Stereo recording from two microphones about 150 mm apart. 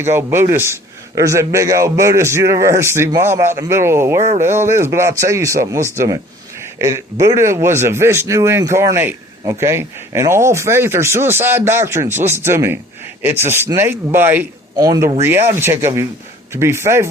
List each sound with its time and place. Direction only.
0.0 s a man's voice: 15° right (ahead or behind)
14.8 s a man's voice: 25° right (ahead or behind)